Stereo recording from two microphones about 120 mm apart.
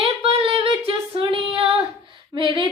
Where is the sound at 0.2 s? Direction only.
55° right (ahead or behind).